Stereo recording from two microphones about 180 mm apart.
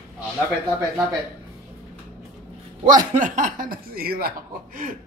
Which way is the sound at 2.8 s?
45° right (ahead or behind).